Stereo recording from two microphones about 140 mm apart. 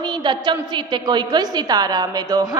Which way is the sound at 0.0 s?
30° right (ahead or behind).